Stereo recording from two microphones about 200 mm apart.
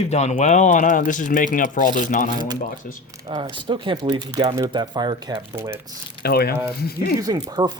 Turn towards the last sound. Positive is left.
turn(degrees=-20)  # may be behind; listen again after turning